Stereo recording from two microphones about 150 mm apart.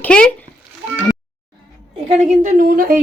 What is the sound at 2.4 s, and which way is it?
Speech, 65° right (ahead or behind).